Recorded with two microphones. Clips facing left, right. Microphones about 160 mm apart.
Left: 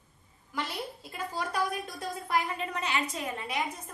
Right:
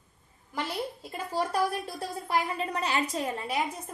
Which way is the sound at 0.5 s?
30° right (ahead or behind).